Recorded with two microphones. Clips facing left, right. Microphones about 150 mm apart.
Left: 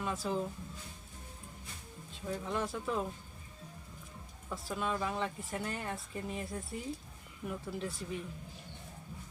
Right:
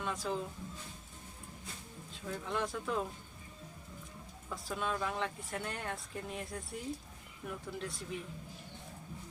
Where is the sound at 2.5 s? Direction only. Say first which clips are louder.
Even; centre (ahead or behind).